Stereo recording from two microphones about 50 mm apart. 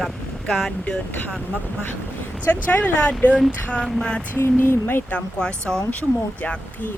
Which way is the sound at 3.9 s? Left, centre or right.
Centre.